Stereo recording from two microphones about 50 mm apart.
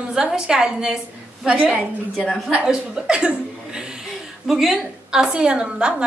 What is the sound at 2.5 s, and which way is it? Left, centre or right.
A woman's voice, centre.